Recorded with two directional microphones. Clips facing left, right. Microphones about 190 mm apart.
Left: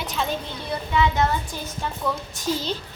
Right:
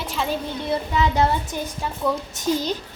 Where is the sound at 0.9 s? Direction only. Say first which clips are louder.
Even; 35° right (ahead or behind).